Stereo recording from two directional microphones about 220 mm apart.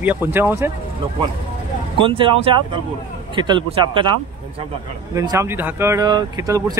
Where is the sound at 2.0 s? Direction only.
25° right (ahead or behind).